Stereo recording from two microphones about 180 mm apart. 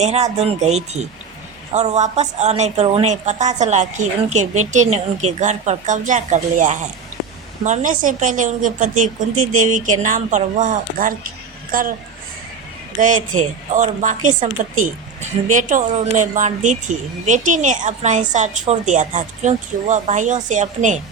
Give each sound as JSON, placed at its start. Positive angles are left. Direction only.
{"t": 0.0, "sound": "a woman's voice", "side_deg": -35}
{"t": 13.0, "sound": "a woman's voice", "side_deg": -45}